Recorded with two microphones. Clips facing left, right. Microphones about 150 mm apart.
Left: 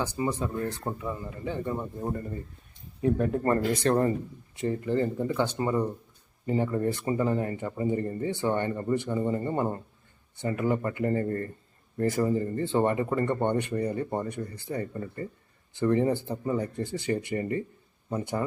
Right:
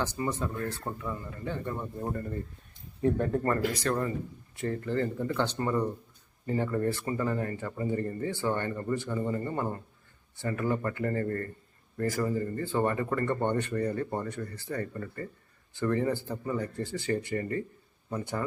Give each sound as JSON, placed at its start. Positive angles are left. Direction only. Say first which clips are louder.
{"t": 0.0, "sound": "speech", "louder": "left 2 dB", "side_deg": 10}
{"t": 3.8, "sound": "speech", "louder": "left 6 dB", "side_deg": 35}
{"t": 4.5, "sound": "speech", "louder": "left 3 dB", "side_deg": 15}